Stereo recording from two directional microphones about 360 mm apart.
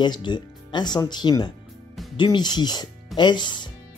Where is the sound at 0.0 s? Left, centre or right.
Centre.